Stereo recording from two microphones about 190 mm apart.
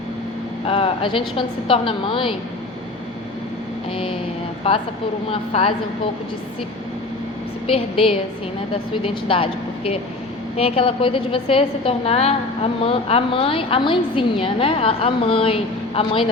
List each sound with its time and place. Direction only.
0.7 s a woman's voice: 30° left (ahead or behind)
3.9 s a woman's voice: 30° left (ahead or behind)
7.7 s a woman's voice: 30° left (ahead or behind)